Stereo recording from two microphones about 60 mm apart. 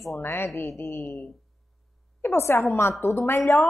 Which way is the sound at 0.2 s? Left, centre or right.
Left.